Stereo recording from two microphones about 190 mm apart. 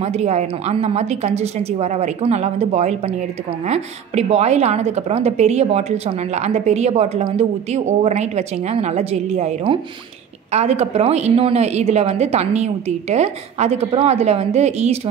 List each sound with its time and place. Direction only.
0.0 s a woman's voice: 35° right (ahead or behind)